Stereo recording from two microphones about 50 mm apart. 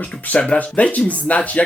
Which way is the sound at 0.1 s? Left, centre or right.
Left.